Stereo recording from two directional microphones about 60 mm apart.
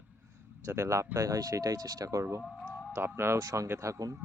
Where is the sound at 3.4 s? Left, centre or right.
Right.